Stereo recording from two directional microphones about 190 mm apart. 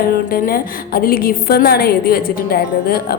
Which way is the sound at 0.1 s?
50° left (ahead or behind).